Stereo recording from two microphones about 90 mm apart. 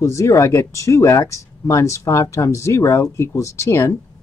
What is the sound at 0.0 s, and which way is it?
Speech, 35° left (ahead or behind).